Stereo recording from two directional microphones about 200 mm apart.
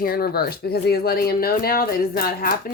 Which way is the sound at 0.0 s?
50° left (ahead or behind).